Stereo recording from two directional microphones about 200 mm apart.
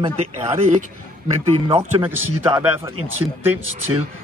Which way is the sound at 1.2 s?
30° right (ahead or behind).